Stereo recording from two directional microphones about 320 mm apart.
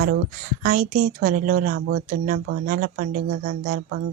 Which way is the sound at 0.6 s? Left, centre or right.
Right.